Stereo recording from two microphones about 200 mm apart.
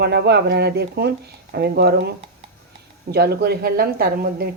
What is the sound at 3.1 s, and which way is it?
Speech, 50° right (ahead or behind).